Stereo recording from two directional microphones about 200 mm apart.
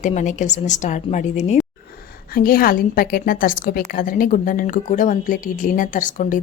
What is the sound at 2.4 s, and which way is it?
Speech, 45° left (ahead or behind).